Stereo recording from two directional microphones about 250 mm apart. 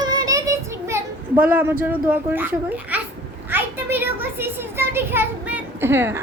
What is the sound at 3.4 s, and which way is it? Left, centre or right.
A child's voice, centre.